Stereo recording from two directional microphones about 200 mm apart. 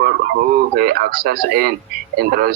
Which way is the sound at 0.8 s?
50° right (ahead or behind).